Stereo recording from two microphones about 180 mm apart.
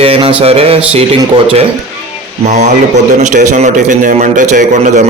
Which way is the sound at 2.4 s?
40° right (ahead or behind).